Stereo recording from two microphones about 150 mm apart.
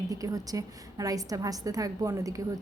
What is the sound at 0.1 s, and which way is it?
Speech, 25° right (ahead or behind).